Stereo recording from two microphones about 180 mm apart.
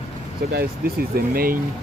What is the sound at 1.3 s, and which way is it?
Speech, 55° right (ahead or behind).